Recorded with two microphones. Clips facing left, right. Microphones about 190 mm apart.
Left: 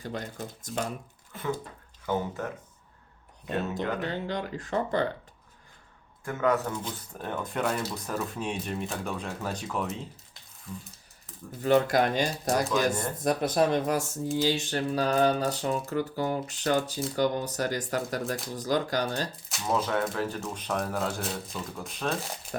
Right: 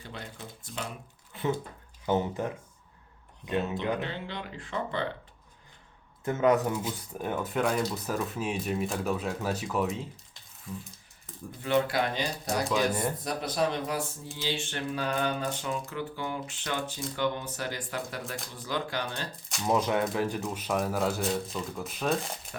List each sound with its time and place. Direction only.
0.0 s speech: 45° left (ahead or behind)
2.0 s speech: 15° right (ahead or behind)
4.0 s speech: 40° left (ahead or behind)
6.2 s speech: 20° right (ahead or behind)
6.7 s speech: 10° right (ahead or behind)
11.6 s speech: 45° left (ahead or behind)
12.6 s speech: centre (ahead or behind)
13.2 s speech: 50° left (ahead or behind)
14.4 s a sound: 40° left (ahead or behind)
19.6 s speech: 15° right (ahead or behind); by 22.4 s centre (ahead or behind)